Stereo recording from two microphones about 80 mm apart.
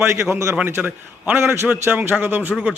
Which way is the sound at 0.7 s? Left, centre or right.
Right.